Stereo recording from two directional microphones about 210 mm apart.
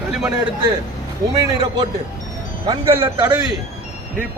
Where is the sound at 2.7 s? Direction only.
25° right (ahead or behind).